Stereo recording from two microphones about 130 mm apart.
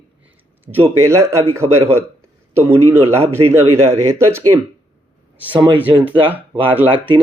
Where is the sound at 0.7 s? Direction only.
20° right (ahead or behind).